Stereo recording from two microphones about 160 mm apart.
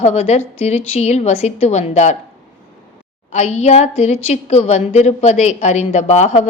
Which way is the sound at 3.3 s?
45° left (ahead or behind).